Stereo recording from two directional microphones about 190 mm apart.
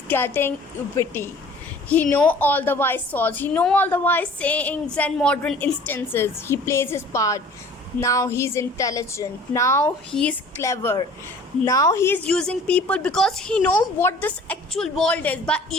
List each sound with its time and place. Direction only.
0.1 s a woman's voice: 10° left (ahead or behind)
10.1 s a woman's voice: 5° left (ahead or behind)
10.6 s a woman's voice: 15° left (ahead or behind)